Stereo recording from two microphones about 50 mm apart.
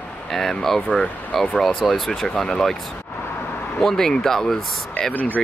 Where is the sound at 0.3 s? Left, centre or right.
Centre.